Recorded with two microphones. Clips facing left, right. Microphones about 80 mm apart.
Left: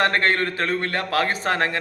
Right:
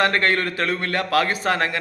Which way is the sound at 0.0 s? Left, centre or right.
Left.